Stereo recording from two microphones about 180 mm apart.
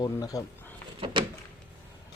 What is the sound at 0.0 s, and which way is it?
Speech, 20° left (ahead or behind).